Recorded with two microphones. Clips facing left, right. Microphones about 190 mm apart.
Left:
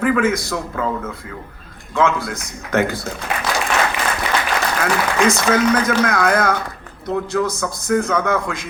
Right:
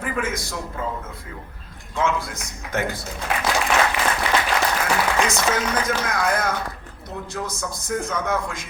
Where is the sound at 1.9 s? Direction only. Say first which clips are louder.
Left 5 dB; 85° left.